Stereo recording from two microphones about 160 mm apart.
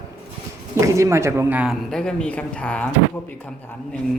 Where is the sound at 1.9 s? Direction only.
5° left (ahead or behind).